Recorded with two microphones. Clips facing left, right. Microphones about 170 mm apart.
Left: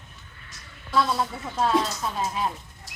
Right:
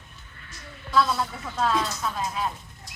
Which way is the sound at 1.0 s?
25° left (ahead or behind).